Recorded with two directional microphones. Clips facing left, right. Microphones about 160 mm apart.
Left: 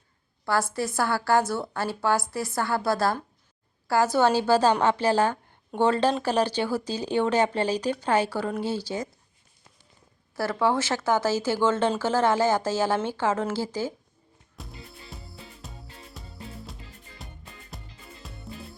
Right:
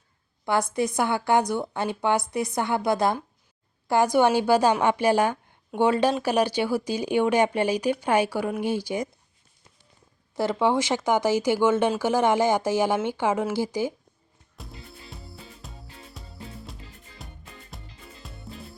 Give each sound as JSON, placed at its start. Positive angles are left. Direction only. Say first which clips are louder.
{"t": 0.7, "sound": "a woman's voice", "louder": "right 2 dB", "side_deg": -20}
{"t": 10.3, "sound": "a woman's voice", "louder": "right 2 dB", "side_deg": -20}
{"t": 14.6, "sound": "music", "louder": "even", "side_deg": 0}